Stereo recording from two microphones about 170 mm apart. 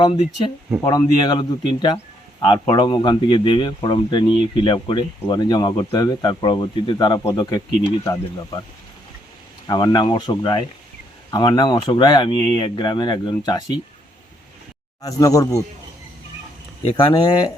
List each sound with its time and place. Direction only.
0.1 s speech: 30° left (ahead or behind)
9.6 s speech: 25° left (ahead or behind)
15.0 s speech: 20° left (ahead or behind)
16.9 s speech: 25° left (ahead or behind)